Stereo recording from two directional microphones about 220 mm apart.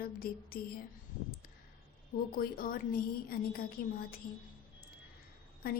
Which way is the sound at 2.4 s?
40° left (ahead or behind).